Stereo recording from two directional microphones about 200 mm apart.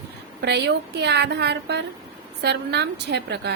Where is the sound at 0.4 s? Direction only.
60° right (ahead or behind).